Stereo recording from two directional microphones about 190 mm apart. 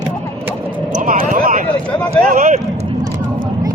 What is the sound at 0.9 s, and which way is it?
Speech, 45° right (ahead or behind).